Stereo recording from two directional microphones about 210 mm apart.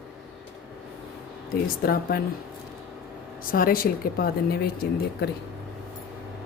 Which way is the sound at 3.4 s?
40° left (ahead or behind).